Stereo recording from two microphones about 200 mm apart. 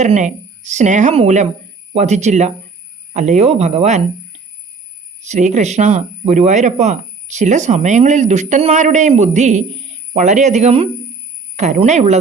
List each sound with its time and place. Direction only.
0.0 s speech: 35° right (ahead or behind)